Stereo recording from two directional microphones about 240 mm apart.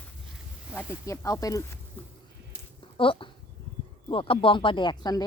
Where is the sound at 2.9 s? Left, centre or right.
Left.